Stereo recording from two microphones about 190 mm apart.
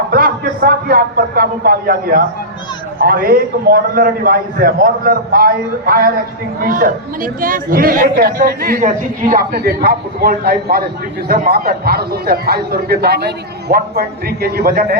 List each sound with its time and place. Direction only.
0.1 s a man's voice: 50° right (ahead or behind)